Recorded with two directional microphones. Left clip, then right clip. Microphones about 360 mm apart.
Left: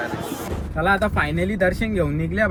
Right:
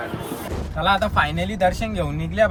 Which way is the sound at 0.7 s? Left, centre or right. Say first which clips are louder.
Right 1 dB; right.